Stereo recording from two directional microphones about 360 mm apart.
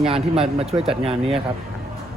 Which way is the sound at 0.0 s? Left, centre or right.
Centre.